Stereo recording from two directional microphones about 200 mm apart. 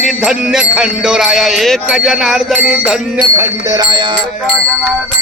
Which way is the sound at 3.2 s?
20° right (ahead or behind).